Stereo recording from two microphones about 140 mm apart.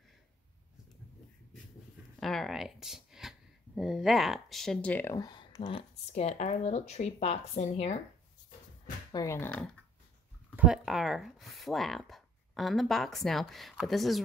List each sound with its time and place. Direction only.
2.1 s speech: centre (ahead or behind)
5.1 s speech: 30° left (ahead or behind); by 8.0 s 50° left (ahead or behind)
9.1 s speech: 20° left (ahead or behind)
10.5 s speech: 10° right (ahead or behind)